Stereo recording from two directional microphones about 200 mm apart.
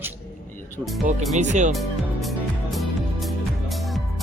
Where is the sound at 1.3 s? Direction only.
35° right (ahead or behind).